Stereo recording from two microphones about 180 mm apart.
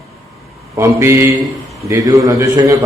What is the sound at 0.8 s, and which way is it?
A man's voice, 15° right (ahead or behind).